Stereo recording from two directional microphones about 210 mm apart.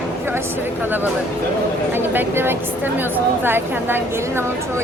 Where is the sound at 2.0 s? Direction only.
10° right (ahead or behind).